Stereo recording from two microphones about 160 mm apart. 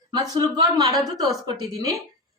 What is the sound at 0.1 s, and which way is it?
A woman's voice, 25° right (ahead or behind).